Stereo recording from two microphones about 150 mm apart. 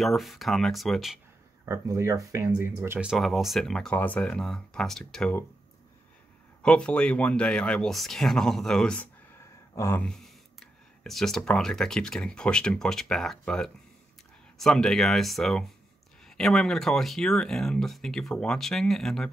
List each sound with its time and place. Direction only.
0.0 s speech: centre (ahead or behind)
1.7 s speech: 20° right (ahead or behind)
3.0 s speech: centre (ahead or behind)
6.6 s speech: 5° left (ahead or behind)
10.0 s speech: centre (ahead or behind)